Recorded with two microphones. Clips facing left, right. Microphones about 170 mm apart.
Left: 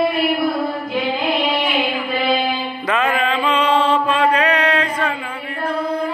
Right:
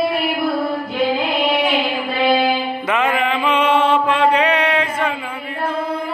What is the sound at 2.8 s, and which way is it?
Mantra, 15° right (ahead or behind).